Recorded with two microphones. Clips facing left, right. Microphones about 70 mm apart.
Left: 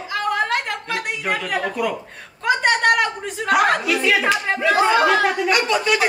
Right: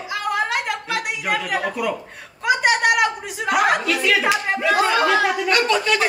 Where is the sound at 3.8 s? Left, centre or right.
Centre.